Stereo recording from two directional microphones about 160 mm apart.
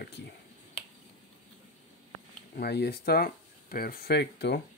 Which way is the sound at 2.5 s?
85° left.